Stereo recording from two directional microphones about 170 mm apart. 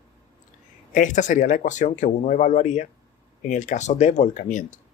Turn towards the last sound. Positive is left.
turn(degrees=45)  # may be behind; listen again after turning